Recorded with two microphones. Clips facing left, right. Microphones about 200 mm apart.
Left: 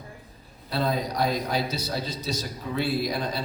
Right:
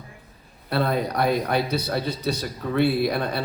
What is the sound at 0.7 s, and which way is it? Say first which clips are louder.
A man's voice: right 3 dB; 60° right (ahead or behind).